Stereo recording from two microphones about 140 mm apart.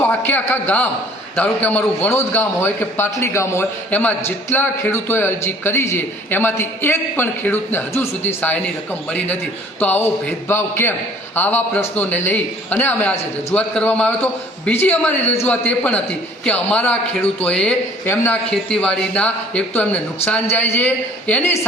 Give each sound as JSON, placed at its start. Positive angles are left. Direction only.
{"t": 0.0, "sound": "a man's voice", "side_deg": 15}